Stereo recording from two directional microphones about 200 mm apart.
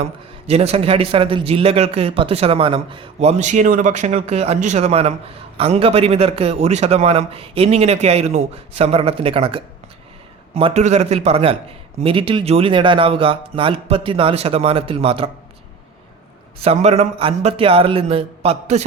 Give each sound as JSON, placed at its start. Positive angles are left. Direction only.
{"t": 0.0, "sound": "a man's voice", "side_deg": -30}
{"t": 16.6, "sound": "a man's voice", "side_deg": -30}